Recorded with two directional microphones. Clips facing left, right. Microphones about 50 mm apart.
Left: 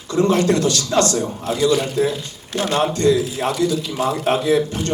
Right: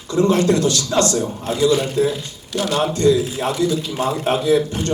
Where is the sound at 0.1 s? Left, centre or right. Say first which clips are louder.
Right 1 dB; left.